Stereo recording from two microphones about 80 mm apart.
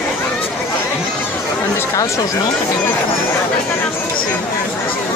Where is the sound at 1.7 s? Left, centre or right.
Left.